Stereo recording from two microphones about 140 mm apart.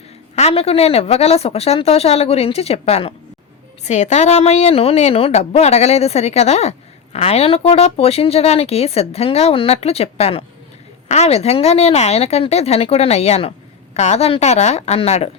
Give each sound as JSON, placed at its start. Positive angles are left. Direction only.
{"t": 0.3, "sound": "a woman's voice", "side_deg": 50}